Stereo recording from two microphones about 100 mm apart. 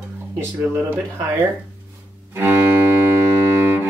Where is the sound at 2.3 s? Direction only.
20° right (ahead or behind).